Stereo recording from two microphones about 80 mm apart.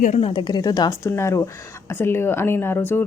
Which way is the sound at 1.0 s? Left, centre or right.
Left.